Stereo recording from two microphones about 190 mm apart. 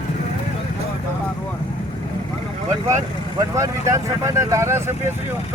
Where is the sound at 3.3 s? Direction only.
15° right (ahead or behind).